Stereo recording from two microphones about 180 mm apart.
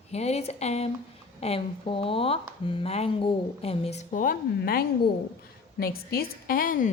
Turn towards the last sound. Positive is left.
turn(degrees=50)  # may be behind; listen again after turning